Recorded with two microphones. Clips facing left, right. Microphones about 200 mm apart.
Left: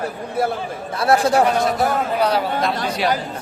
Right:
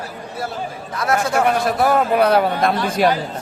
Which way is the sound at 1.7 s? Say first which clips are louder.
Right 3 dB; 55° right (ahead or behind).